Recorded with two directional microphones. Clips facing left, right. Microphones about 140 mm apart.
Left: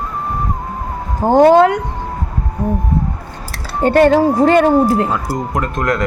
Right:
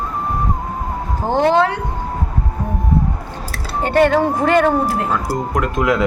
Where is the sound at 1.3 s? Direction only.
45° left (ahead or behind).